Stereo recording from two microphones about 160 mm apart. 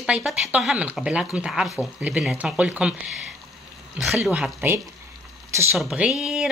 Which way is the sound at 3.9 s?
Centre (ahead or behind).